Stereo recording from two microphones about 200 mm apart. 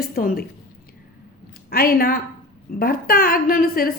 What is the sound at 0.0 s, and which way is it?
Speech, 50° left (ahead or behind).